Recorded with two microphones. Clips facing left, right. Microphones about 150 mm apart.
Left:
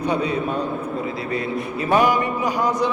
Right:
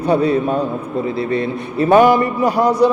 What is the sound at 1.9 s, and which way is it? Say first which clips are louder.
Speech: right 7 dB; 40° right (ahead or behind).